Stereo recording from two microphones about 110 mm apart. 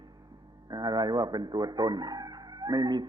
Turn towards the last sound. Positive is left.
turn(degrees=-40)  # may be behind; listen again after turning